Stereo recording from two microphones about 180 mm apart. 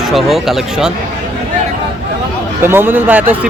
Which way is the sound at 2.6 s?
10° right (ahead or behind).